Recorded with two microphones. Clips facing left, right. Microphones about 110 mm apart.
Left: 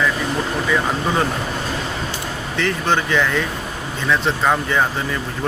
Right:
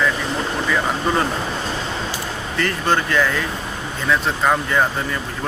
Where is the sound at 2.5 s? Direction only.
Centre (ahead or behind).